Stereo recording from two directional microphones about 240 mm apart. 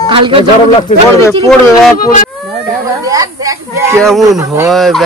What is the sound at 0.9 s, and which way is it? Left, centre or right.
Speech, left.